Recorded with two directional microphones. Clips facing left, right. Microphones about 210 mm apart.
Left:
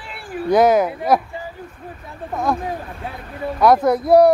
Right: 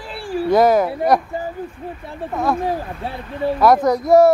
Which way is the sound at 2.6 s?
30° right (ahead or behind).